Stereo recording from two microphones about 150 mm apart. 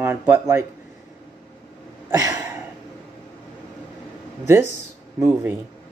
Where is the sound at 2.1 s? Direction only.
25° right (ahead or behind).